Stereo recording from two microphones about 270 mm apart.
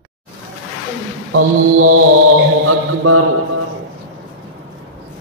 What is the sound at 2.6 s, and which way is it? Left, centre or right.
Speech, right.